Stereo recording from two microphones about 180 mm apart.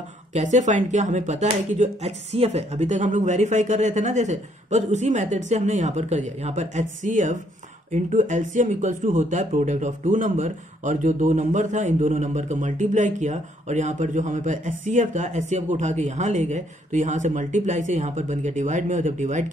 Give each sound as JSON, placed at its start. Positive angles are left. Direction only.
{"t": 0.3, "sound": "speech", "side_deg": -40}